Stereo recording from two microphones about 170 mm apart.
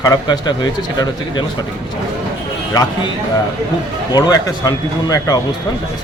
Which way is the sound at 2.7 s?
20° left (ahead or behind).